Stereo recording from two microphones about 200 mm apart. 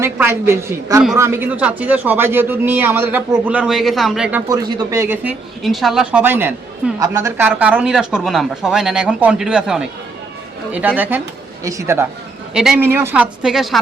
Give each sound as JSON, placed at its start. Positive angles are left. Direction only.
{"t": 0.0, "sound": "speech", "side_deg": -10}